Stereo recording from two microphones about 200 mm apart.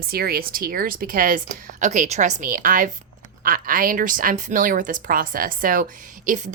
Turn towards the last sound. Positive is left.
turn(degrees=-40)  # may be behind; listen again after turning